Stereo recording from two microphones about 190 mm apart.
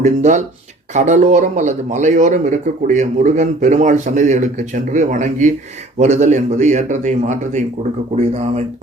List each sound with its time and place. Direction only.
0.0 s speech: 40° right (ahead or behind)